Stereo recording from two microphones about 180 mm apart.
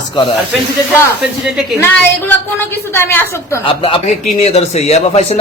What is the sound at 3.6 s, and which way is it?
A woman's voice, 30° left (ahead or behind).